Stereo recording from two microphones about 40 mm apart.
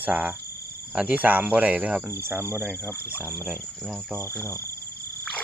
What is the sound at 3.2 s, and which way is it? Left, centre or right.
Speech, right.